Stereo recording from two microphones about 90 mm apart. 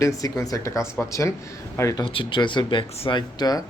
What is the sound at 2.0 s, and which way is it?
Speech, 70° left (ahead or behind).